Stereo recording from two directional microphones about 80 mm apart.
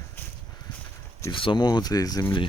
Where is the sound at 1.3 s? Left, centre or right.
Left.